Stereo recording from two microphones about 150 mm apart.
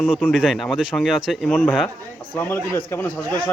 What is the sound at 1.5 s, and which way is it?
Speech, 10° left (ahead or behind).